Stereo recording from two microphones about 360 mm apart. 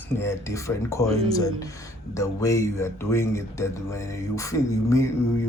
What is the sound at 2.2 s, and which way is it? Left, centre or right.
Speech, centre.